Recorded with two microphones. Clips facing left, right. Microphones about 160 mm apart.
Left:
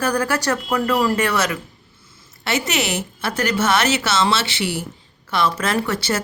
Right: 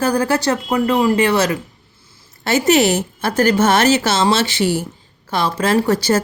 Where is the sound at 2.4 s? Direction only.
45° right (ahead or behind).